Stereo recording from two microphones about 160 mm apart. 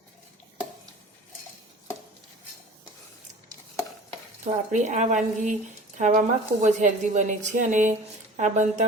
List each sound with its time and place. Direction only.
4.4 s speech: 50° right (ahead or behind)